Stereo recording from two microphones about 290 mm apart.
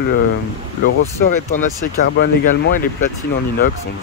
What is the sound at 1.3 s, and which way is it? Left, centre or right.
Speech, left.